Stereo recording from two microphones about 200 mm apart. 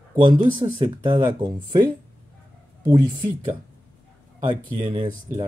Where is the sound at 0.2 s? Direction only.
25° right (ahead or behind).